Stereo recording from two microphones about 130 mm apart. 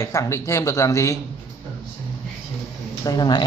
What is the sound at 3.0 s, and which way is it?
Speech, 30° left (ahead or behind).